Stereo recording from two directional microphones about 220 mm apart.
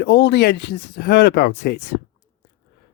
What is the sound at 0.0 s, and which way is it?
Speech, 50° left (ahead or behind).